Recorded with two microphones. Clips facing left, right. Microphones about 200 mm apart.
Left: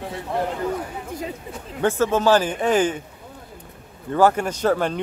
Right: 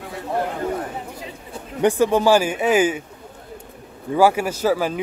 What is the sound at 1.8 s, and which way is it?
Speech, 15° right (ahead or behind).